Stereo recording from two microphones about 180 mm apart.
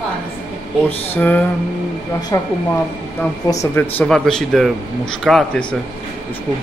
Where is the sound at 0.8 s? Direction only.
10° left (ahead or behind).